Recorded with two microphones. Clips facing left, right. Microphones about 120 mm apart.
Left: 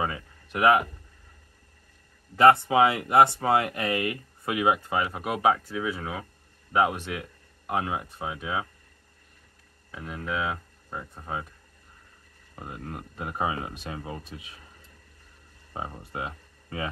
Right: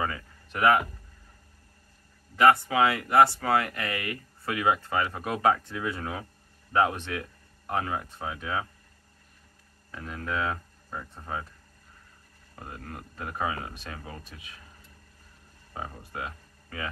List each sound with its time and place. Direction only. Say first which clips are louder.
0.0 s speech: left 1 dB; 15° left (ahead or behind)
2.3 s speech: left 3 dB; 25° left (ahead or behind); by 8.6 s 10° left (ahead or behind)
9.8 s speech: left 1 dB; 10° left (ahead or behind)
12.5 s speech: left 3 dB; 20° left (ahead or behind)
15.7 s speech: left 2 dB; 20° left (ahead or behind)